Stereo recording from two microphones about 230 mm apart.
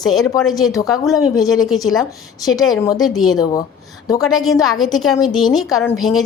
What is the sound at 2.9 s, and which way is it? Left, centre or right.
A woman's voice, centre.